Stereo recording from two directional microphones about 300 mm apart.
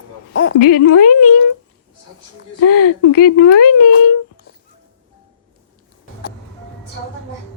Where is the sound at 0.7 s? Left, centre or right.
Left.